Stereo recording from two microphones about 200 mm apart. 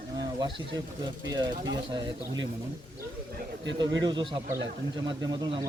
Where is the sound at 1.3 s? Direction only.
20° right (ahead or behind).